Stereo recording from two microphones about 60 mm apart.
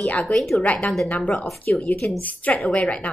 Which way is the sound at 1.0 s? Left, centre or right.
Left.